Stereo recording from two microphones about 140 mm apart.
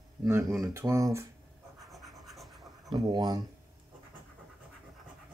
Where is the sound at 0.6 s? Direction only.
20° right (ahead or behind).